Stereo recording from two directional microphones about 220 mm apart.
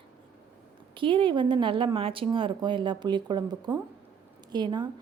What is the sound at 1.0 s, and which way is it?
A woman's voice, 25° right (ahead or behind).